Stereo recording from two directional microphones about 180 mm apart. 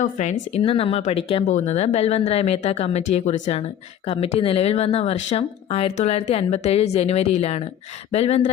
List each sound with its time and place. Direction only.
0.0 s speech: 40° left (ahead or behind)